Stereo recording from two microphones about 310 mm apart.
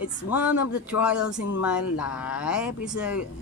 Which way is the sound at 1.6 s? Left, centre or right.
Centre.